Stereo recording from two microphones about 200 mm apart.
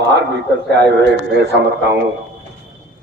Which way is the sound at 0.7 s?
55° right (ahead or behind).